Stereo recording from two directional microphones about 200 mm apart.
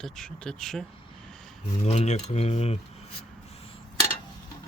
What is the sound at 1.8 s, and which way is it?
Speech, 35° left (ahead or behind).